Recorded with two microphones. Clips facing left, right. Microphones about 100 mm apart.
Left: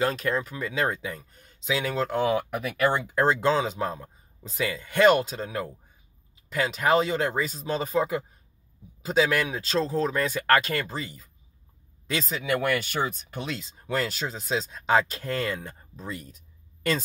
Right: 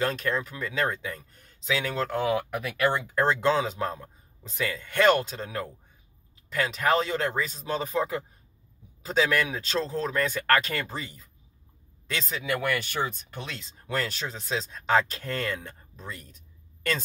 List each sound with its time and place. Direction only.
0.0 s speech: 10° left (ahead or behind)
2.3 s speech: 20° left (ahead or behind)
3.1 s speech: 5° left (ahead or behind)
12.6 s speech: 15° left (ahead or behind)